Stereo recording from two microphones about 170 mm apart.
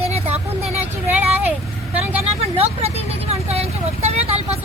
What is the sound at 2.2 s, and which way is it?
Speech, 35° right (ahead or behind).